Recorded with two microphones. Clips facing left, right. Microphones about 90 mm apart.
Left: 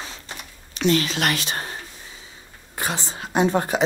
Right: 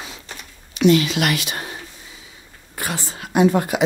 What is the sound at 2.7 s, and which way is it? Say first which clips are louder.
Speech: even; 25° left (ahead or behind).